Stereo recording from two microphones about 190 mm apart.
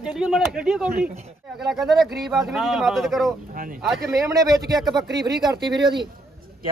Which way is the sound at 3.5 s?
45° right (ahead or behind).